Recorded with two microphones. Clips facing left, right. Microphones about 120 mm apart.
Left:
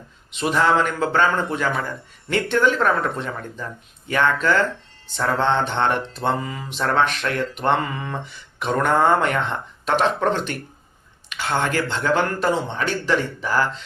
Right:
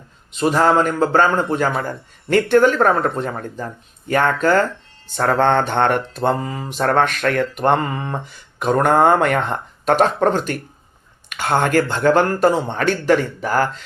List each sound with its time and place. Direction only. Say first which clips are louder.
0.3 s a man's voice: right 4 dB; 40° right (ahead or behind)
2.3 s mantra: right 6 dB; 45° right (ahead or behind)